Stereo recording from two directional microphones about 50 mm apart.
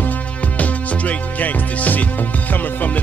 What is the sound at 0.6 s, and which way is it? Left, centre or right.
Music, left.